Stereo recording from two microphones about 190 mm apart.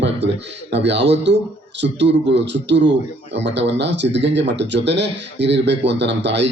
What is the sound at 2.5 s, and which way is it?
Speech, 70° right (ahead or behind).